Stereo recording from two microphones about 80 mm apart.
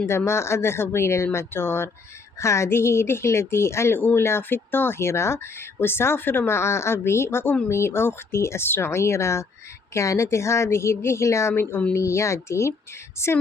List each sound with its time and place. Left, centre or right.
0.0 s speech: left
11.6 s speech: centre
11.9 s speech: left